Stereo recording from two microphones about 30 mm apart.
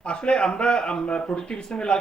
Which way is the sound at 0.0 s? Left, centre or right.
Left.